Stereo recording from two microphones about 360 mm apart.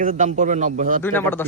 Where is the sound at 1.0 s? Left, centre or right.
Centre.